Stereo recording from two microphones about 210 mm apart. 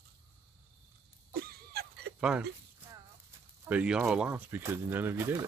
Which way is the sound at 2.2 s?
5° right (ahead or behind).